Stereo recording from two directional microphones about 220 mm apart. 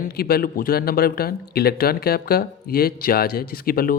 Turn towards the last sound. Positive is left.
turn(degrees=40)  # may be behind; listen again after turning